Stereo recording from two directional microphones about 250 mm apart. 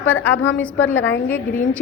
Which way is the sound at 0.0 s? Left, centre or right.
Centre.